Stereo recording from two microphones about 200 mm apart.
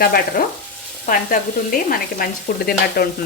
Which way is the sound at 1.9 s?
50° left (ahead or behind).